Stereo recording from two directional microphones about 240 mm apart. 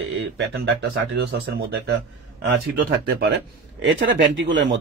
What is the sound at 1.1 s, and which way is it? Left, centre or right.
Speech, right.